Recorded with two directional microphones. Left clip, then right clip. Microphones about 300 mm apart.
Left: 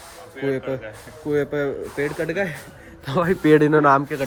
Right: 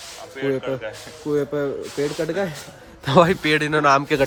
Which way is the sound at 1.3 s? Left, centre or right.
Centre.